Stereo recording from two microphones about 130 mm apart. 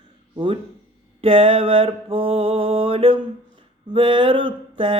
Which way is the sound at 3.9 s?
40° right (ahead or behind).